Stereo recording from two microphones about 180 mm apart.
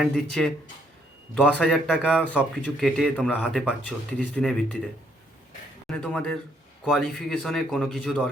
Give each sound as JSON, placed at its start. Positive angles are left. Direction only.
{"t": 0.0, "sound": "speech", "side_deg": 0}
{"t": 6.0, "sound": "speech", "side_deg": 5}